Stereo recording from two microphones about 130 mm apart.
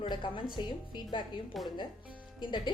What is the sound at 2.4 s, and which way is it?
Speech, 35° left (ahead or behind).